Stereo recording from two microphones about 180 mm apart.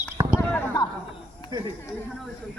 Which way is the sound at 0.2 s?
20° right (ahead or behind).